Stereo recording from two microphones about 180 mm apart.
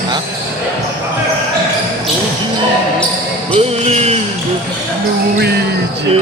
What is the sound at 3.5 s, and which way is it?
Speech, 35° right (ahead or behind).